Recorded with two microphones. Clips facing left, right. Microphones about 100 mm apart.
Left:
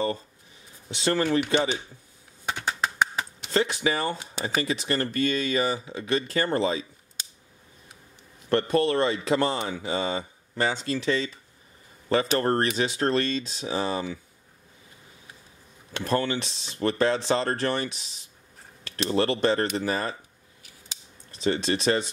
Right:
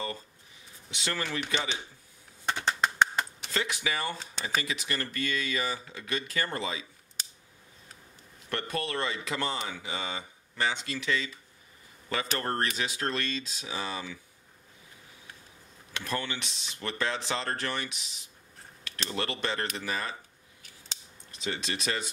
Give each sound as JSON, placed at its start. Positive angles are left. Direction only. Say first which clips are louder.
{"t": 0.8, "sound": "speech", "louder": "left 10 dB", "side_deg": 35}
{"t": 2.4, "sound": "a sound", "louder": "even", "side_deg": 5}
{"t": 3.5, "sound": "speech", "louder": "left 7 dB", "side_deg": 35}
{"t": 8.5, "sound": "speech", "louder": "left 11 dB", "side_deg": 35}
{"t": 15.9, "sound": "speech", "louder": "left 8 dB", "side_deg": 35}
{"t": 21.3, "sound": "speech", "louder": "left 9 dB", "side_deg": 35}